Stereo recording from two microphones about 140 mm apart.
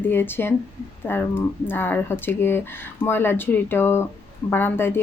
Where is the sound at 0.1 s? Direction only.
15° left (ahead or behind).